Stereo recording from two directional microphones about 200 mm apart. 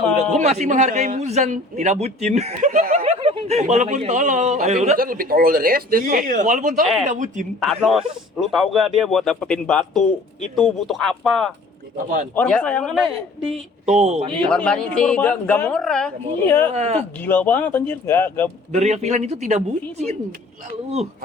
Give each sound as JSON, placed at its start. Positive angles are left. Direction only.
{"t": 0.3, "sound": "a man's voice", "side_deg": -35}
{"t": 4.9, "sound": "a man's voice", "side_deg": -45}
{"t": 7.6, "sound": "a man's voice", "side_deg": 0}
{"t": 11.9, "sound": "a man's voice", "side_deg": -40}
{"t": 12.3, "sound": "a man's voice", "side_deg": 5}
{"t": 14.0, "sound": "a man's voice", "side_deg": -35}
{"t": 14.3, "sound": "a man's voice", "side_deg": 5}
{"t": 16.7, "sound": "a man's voice", "side_deg": -35}
{"t": 17.2, "sound": "speech", "side_deg": 10}
{"t": 18.7, "sound": "a man's voice", "side_deg": -35}